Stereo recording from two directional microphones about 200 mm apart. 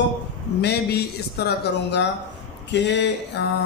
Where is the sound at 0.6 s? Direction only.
55° left (ahead or behind).